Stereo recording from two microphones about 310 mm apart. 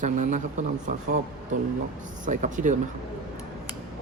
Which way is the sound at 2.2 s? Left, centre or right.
Right.